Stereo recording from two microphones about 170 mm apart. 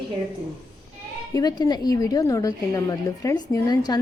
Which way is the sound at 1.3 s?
25° left (ahead or behind).